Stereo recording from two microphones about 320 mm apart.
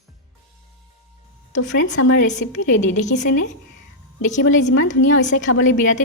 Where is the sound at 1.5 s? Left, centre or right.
Left.